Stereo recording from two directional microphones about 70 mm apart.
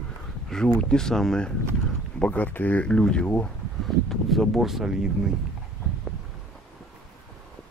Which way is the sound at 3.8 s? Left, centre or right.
Centre.